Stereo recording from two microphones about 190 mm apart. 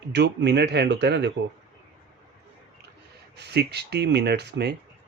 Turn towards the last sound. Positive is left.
turn(degrees=-60)  # may be behind; listen again after turning